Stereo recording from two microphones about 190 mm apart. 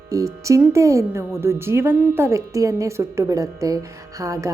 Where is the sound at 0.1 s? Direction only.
15° right (ahead or behind).